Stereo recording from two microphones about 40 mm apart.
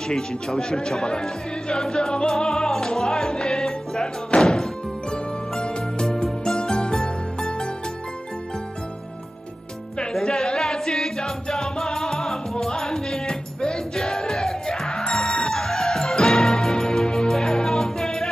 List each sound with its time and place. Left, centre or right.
0.1 s speech: centre
2.3 s music: centre
5.1 s music: left
10.1 s music: centre